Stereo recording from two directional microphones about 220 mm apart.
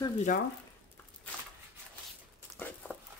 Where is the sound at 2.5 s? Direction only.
Centre (ahead or behind).